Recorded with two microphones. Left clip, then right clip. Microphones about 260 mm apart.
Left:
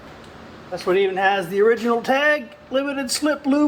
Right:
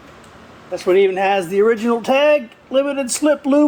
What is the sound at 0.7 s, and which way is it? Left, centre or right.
Speech, right.